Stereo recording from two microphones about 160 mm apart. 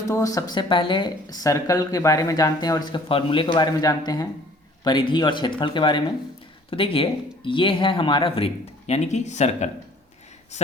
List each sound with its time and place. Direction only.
0.0 s speech: 20° left (ahead or behind)
0.5 s speech: 30° left (ahead or behind); by 9.6 s 45° left (ahead or behind)